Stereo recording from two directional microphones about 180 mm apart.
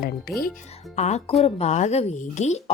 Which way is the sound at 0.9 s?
40° left (ahead or behind).